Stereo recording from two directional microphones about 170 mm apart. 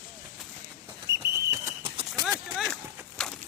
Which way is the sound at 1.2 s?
15° right (ahead or behind).